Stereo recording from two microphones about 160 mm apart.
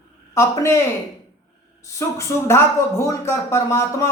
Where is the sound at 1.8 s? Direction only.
20° left (ahead or behind).